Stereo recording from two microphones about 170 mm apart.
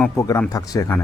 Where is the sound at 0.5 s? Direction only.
20° left (ahead or behind).